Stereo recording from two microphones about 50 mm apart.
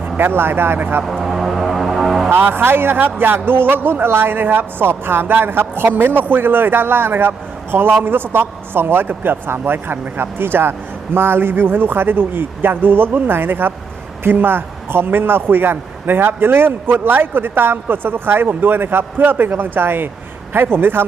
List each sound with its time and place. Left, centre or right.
0.0 s a man's voice: right
1.2 s music: centre
2.3 s a man's voice: right